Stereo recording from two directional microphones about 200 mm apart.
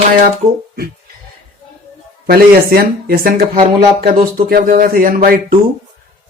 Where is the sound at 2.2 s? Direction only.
50° right (ahead or behind).